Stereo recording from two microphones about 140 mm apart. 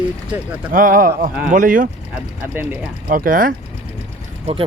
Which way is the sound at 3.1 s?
80° right.